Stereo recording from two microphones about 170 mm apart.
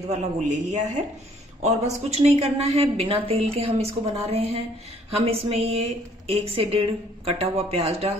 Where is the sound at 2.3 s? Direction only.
35° right (ahead or behind).